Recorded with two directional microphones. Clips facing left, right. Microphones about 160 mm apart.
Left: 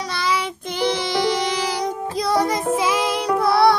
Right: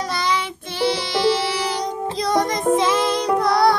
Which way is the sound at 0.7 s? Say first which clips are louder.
Even; 20° left (ahead or behind).